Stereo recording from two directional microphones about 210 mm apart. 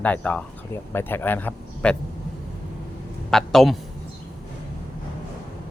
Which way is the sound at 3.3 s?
Centre (ahead or behind).